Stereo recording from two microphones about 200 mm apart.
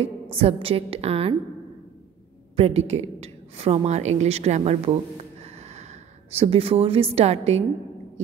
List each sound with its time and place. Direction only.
0.0 s a woman's voice: 30° right (ahead or behind)
2.5 s a woman's voice: 30° right (ahead or behind)